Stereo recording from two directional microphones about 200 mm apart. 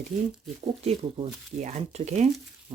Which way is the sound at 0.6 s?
30° right (ahead or behind).